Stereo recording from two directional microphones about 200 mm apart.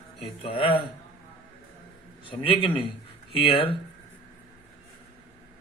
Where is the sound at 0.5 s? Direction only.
25° left (ahead or behind).